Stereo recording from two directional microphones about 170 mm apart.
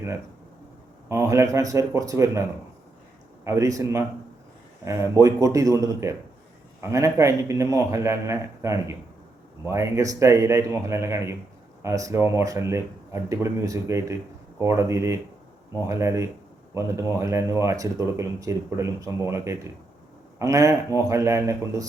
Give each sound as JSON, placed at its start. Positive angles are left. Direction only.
{"t": 1.0, "sound": "speech", "side_deg": -15}
{"t": 3.4, "sound": "speech", "side_deg": -15}